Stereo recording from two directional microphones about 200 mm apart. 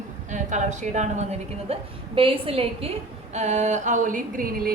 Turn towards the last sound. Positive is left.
turn(degrees=-45)  # may be behind; listen again after turning